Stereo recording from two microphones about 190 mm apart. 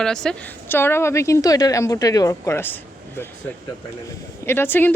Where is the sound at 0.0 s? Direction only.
5° left (ahead or behind).